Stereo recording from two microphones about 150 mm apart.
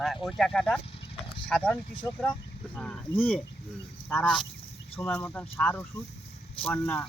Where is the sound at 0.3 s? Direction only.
Centre (ahead or behind).